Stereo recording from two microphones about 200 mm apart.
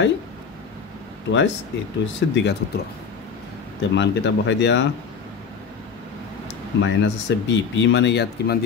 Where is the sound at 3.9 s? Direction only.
60° left (ahead or behind).